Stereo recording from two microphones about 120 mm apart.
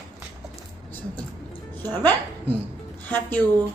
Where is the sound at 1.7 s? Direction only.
15° left (ahead or behind).